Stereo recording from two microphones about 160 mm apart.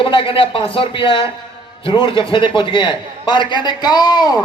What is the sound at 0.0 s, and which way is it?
A man's voice, 35° left (ahead or behind).